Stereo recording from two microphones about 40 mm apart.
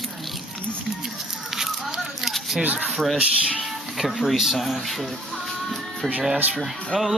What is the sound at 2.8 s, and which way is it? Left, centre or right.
Speech, centre.